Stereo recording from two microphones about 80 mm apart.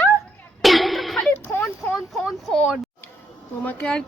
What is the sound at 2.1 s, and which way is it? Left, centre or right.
Speech, centre.